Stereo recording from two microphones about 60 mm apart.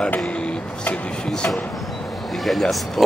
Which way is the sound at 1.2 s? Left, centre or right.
Centre.